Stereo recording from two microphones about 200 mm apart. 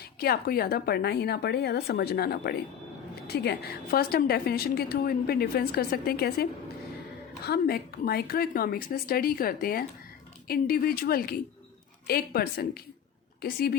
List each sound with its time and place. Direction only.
0.2 s a woman's voice: 50° left (ahead or behind)